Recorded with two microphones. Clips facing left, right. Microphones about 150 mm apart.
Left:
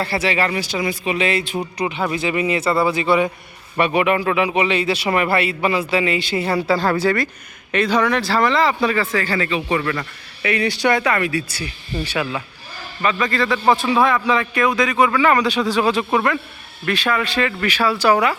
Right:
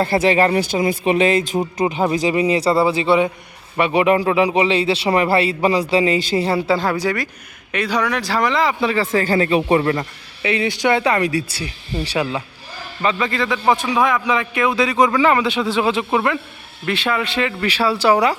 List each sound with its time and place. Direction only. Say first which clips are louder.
0.0 s a man's voice: right 5 dB; 50° right (ahead or behind); by 9.0 s 20° right (ahead or behind)
9.0 s a man's voice: right 4 dB; 40° right (ahead or behind)
9.8 s a man's voice: right 4 dB; 25° right (ahead or behind)
11.0 s a man's voice: right 2 dB; 35° right (ahead or behind)
15.2 s a man's voice: even; 20° right (ahead or behind)